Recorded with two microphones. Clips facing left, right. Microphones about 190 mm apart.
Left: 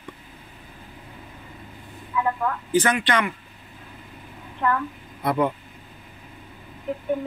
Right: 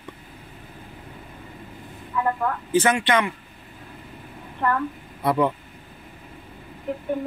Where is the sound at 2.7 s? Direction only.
25° right (ahead or behind).